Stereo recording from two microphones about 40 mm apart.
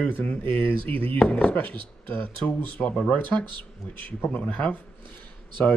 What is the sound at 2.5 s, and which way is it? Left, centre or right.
Speech, left.